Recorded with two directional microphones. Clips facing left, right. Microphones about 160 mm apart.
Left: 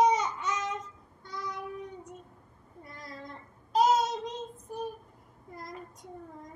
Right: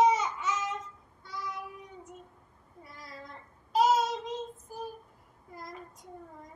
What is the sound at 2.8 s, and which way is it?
Child singing, 5° right (ahead or behind).